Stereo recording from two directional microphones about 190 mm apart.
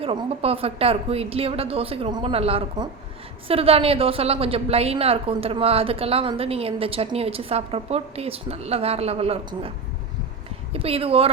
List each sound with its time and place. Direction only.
0.0 s a woman's voice: 30° right (ahead or behind)